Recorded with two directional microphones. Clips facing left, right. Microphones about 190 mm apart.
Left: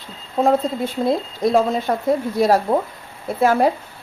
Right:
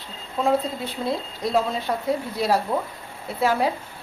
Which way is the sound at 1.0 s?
50° left (ahead or behind).